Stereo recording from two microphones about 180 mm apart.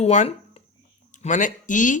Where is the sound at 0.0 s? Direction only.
40° left (ahead or behind).